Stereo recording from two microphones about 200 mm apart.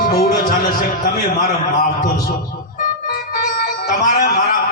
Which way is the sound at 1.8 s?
50° left (ahead or behind).